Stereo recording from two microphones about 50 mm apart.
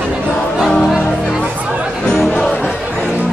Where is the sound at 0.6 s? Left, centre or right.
Centre.